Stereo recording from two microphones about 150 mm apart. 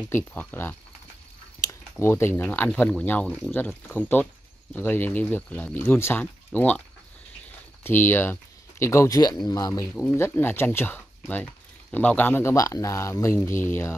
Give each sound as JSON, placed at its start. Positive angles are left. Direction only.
{"t": 0.1, "sound": "speech", "side_deg": 10}
{"t": 7.8, "sound": "speech", "side_deg": 15}